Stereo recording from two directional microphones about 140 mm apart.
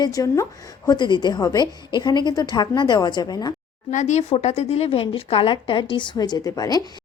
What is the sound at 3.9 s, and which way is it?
Speech, 55° left (ahead or behind).